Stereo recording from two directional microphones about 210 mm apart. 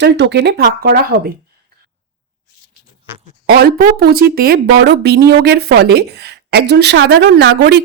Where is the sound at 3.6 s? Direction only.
45° right (ahead or behind).